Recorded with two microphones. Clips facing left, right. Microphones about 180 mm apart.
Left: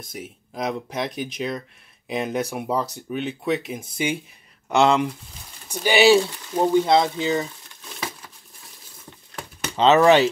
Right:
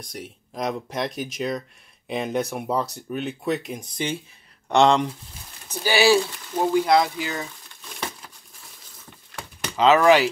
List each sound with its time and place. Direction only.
0.0 s speech: 5° left (ahead or behind)
5.9 s speech: 20° left (ahead or behind)
9.8 s speech: 25° left (ahead or behind)